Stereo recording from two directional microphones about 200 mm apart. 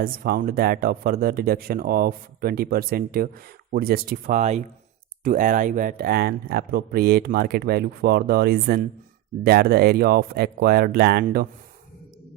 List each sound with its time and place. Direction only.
0.0 s speech: 45° right (ahead or behind)